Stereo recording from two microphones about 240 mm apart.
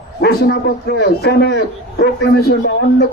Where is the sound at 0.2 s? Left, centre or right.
Left.